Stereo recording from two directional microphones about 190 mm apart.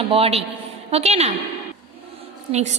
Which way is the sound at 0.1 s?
30° right (ahead or behind).